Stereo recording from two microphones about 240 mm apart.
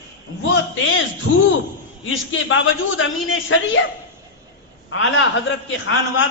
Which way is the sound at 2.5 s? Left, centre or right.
Left.